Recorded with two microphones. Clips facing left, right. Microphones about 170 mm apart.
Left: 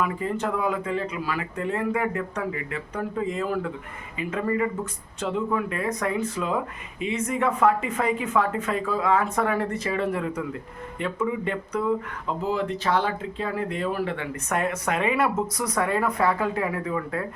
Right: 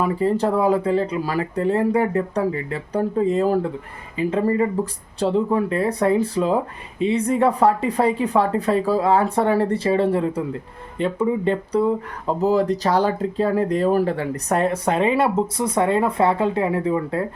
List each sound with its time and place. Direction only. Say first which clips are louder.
0.0 s speech: right 7 dB; 35° right (ahead or behind)